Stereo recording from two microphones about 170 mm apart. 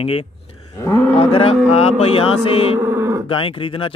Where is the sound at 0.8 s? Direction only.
15° left (ahead or behind).